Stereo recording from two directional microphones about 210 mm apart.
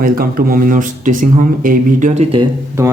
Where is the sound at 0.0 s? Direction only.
45° right (ahead or behind).